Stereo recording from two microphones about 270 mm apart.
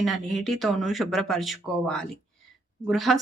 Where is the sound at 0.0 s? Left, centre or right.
Centre.